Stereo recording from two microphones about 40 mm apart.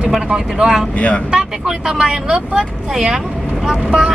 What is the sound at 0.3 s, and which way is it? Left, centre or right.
Speech, centre.